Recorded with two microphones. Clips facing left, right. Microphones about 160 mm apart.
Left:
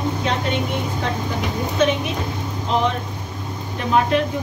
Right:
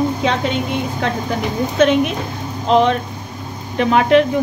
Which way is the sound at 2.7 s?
80° right.